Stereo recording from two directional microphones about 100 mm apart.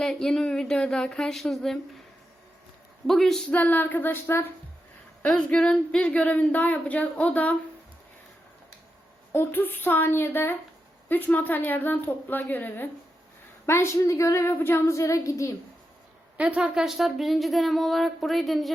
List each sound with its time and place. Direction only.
0.0 s speech: 5° left (ahead or behind)
3.1 s speech: 5° left (ahead or behind)
3.5 s a woman's voice: 15° left (ahead or behind)
5.2 s speech: 10° left (ahead or behind)
9.3 s a woman's voice: 20° left (ahead or behind)
16.4 s speech: 10° right (ahead or behind)